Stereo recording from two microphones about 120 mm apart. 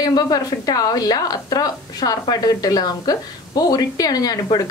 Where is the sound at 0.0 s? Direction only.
35° left (ahead or behind).